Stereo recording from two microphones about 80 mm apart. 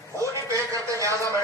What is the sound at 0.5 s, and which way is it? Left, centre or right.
Speech, right.